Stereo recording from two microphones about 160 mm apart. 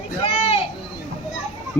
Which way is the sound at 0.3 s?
40° left (ahead or behind).